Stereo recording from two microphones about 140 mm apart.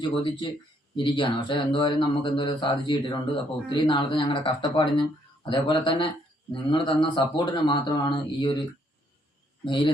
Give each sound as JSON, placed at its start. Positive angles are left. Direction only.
{"t": 0.0, "sound": "speech", "side_deg": 35}
{"t": 9.6, "sound": "speech", "side_deg": 35}